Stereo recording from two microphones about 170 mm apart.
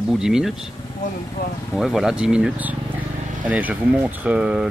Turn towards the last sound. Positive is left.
turn(degrees=-5)  # may be behind; listen again after turning